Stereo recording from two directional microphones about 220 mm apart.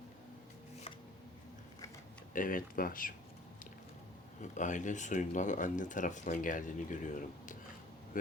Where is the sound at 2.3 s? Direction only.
40° left (ahead or behind).